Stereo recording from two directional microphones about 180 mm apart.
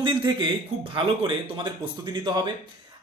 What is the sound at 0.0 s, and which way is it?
Speech, 25° right (ahead or behind).